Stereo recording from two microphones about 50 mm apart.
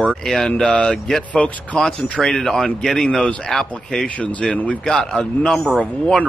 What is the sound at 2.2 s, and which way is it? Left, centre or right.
A man's voice, centre.